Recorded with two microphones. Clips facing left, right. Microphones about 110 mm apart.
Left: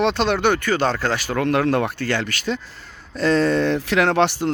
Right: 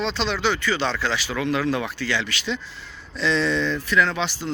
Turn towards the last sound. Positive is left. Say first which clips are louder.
# left 8 dB
turn(degrees=60)  # may be behind; listen again after turning